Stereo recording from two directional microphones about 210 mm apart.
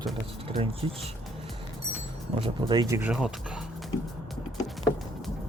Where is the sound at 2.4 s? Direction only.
20° right (ahead or behind); by 3.6 s 5° right (ahead or behind).